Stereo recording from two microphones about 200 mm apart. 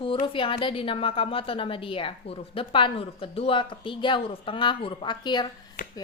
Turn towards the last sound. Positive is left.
turn(degrees=20)  # may be behind; listen again after turning